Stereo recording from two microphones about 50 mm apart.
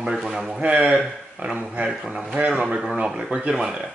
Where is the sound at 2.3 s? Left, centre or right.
Right.